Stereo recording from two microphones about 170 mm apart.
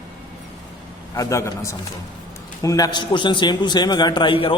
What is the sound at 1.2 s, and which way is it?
A man's voice, 20° left (ahead or behind).